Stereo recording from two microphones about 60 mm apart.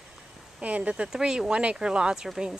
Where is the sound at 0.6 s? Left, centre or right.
Right.